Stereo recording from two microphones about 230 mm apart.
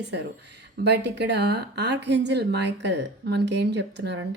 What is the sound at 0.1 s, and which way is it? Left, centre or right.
Speech, right.